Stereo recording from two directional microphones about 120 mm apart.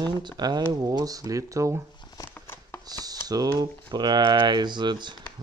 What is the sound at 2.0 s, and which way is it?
Shuffling cards, 35° left (ahead or behind).